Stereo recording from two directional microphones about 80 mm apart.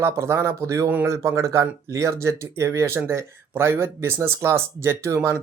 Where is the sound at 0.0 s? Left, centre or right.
Right.